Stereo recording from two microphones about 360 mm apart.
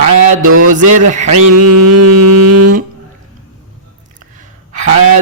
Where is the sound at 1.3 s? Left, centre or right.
Right.